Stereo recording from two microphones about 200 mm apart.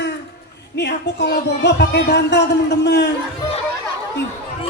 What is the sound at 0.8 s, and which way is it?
Speech, 55° left (ahead or behind).